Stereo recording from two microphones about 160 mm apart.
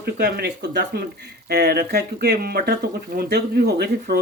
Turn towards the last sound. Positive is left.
turn(degrees=-90)